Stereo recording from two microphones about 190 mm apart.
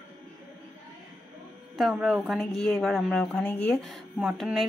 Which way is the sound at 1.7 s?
Centre (ahead or behind).